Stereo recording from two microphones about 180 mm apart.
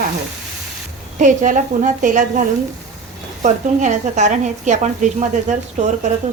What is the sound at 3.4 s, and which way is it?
Speech, 40° right (ahead or behind).